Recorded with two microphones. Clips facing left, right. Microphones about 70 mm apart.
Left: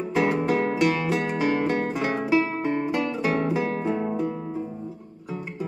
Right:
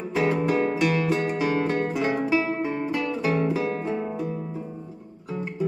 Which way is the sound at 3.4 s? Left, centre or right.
Centre.